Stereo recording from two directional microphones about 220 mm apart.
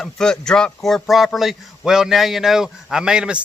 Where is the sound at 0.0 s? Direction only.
5° left (ahead or behind).